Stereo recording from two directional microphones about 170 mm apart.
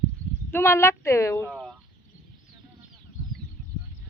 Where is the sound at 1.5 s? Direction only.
Centre (ahead or behind).